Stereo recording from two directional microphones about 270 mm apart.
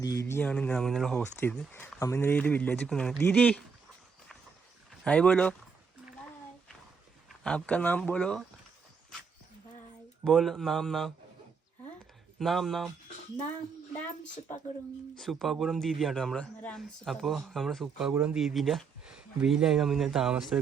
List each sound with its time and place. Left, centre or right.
0.0 s speech: centre
5.0 s speech: centre
7.3 s speech: centre
10.2 s speech: centre
12.4 s speech: centre
15.1 s speech: centre